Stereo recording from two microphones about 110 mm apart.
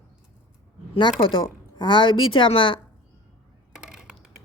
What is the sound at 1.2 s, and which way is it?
A woman's voice, 50° left (ahead or behind).